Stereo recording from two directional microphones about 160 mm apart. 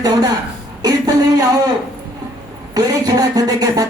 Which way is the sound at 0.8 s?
25° right (ahead or behind).